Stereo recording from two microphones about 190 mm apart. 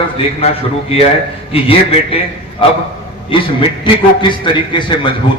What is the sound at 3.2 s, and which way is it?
A man's voice, 25° left (ahead or behind).